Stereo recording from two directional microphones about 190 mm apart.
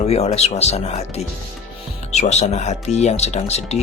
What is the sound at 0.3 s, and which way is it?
Speech, 35° left (ahead or behind).